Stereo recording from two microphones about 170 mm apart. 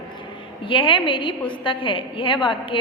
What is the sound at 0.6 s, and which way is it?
A woman's voice, 30° left (ahead or behind).